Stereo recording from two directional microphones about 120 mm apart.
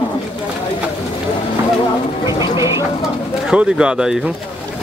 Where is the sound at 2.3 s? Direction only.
40° left (ahead or behind).